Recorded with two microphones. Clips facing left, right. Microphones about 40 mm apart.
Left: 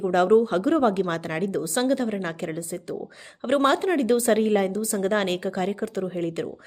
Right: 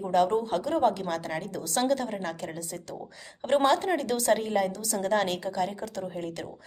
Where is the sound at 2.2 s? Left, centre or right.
Left.